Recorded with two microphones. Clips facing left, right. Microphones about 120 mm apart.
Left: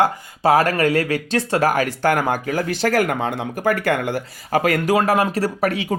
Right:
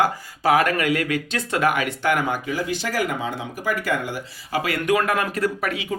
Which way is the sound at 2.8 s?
60° left (ahead or behind).